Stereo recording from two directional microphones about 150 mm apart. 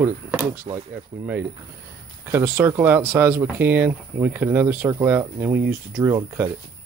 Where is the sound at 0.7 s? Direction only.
40° right (ahead or behind).